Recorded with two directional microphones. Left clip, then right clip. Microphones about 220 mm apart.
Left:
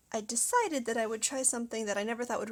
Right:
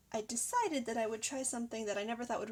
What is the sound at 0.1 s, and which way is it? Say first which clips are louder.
Speech: left 6 dB; 25° left (ahead or behind).